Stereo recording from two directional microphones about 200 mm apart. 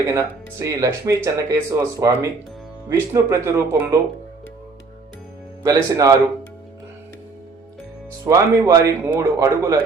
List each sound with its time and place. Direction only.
0.1 s speech: 15° right (ahead or behind)
5.6 s speech: 15° right (ahead or behind)
8.2 s speech: 15° right (ahead or behind)